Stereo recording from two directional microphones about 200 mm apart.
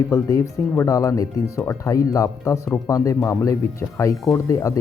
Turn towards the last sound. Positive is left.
turn(degrees=15)  # may be behind; listen again after turning